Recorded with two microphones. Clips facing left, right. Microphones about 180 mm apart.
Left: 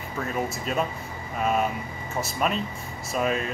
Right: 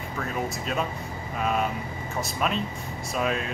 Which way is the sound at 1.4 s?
Centre (ahead or behind).